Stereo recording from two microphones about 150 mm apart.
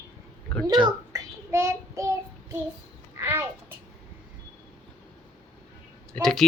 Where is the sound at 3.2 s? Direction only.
15° right (ahead or behind).